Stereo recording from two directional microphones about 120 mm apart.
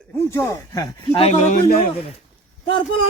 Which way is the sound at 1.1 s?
60° left (ahead or behind).